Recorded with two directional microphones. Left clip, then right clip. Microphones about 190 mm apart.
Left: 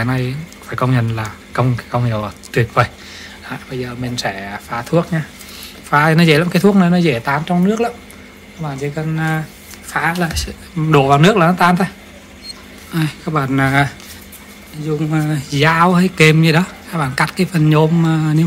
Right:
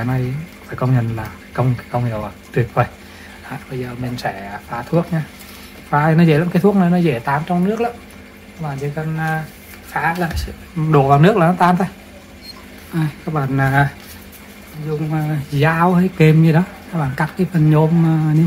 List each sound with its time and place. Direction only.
0.7 s speech: 50° left (ahead or behind)
3.4 s speech: 30° left (ahead or behind)
12.9 s speech: 35° left (ahead or behind)
15.0 s speech: 45° left (ahead or behind)